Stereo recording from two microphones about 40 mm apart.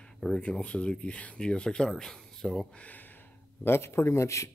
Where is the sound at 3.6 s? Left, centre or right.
Left.